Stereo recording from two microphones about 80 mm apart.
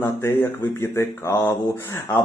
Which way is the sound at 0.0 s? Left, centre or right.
Left.